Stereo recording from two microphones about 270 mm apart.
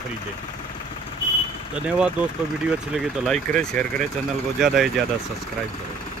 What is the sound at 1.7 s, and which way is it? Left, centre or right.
Speech, centre.